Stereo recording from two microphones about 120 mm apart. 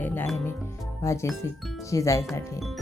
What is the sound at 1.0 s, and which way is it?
Speech, 25° left (ahead or behind).